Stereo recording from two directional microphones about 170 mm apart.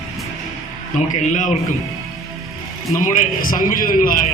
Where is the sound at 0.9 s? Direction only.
45° left (ahead or behind).